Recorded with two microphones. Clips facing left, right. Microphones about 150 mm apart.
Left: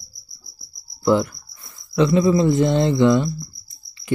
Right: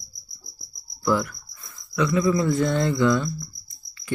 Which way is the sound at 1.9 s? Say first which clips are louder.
Left 5 dB; 25° left (ahead or behind).